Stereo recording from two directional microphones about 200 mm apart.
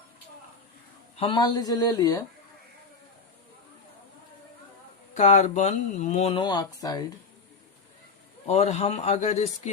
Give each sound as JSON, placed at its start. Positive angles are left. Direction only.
{"t": 1.1, "sound": "speech", "side_deg": 25}
{"t": 5.1, "sound": "speech", "side_deg": 35}
{"t": 8.4, "sound": "speech", "side_deg": 35}